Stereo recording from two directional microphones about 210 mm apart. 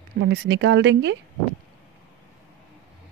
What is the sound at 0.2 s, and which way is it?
Speech, 55° right (ahead or behind).